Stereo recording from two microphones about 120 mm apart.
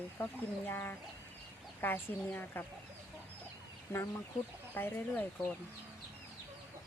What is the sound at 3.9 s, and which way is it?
Speech, 20° left (ahead or behind).